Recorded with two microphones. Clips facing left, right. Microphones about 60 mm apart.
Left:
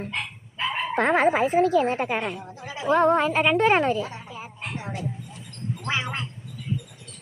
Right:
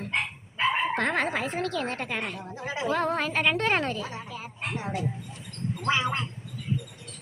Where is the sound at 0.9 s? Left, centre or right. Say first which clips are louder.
Left 7 dB; centre.